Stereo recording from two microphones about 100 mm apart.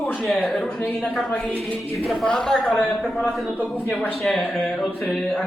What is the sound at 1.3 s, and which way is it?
Speech, 15° left (ahead or behind).